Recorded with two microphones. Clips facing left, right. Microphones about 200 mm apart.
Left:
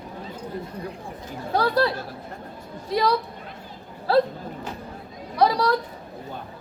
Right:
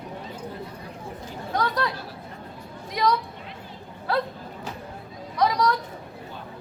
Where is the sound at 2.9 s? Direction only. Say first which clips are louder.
Left 2 dB; 30° left (ahead or behind).